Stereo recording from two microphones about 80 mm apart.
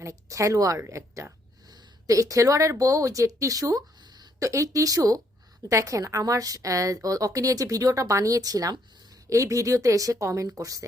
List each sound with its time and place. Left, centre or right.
0.0 s a woman's voice: right
4.0 s a sound: right
4.4 s a woman's voice: right